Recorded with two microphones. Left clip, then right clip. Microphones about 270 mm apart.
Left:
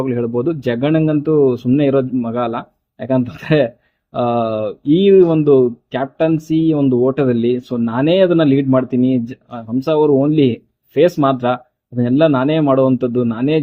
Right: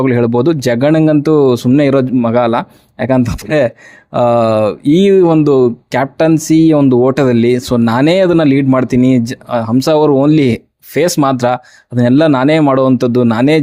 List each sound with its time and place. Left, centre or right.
0.0 s speech: right